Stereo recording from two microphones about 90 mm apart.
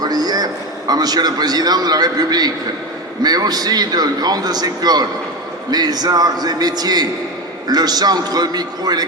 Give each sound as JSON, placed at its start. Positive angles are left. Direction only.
{"t": 0.0, "sound": "a man's voice", "side_deg": -45}